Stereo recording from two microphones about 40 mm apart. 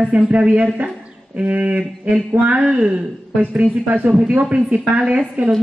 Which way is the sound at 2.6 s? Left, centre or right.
Right.